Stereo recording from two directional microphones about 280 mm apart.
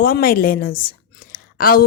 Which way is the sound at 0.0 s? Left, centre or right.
Left.